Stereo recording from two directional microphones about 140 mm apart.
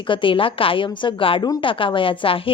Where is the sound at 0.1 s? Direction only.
35° left (ahead or behind).